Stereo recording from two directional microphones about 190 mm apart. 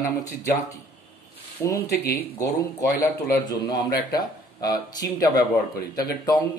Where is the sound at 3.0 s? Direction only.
15° left (ahead or behind).